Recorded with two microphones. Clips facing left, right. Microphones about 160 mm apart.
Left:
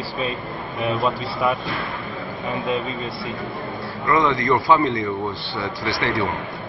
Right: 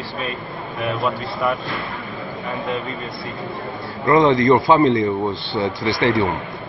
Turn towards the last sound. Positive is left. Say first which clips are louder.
# right 5 dB
turn(degrees=-20)  # may be behind; listen again after turning